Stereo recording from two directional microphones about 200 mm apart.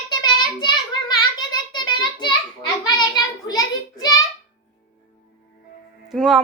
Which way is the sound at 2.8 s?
20° left (ahead or behind).